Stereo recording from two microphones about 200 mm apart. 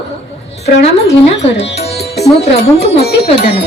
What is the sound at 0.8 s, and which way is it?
Music, 30° left (ahead or behind).